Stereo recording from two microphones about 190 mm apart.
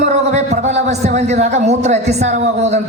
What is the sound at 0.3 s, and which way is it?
Speech, 35° right (ahead or behind).